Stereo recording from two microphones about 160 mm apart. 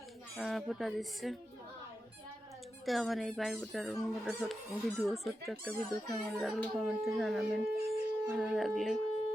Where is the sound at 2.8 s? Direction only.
Centre (ahead or behind).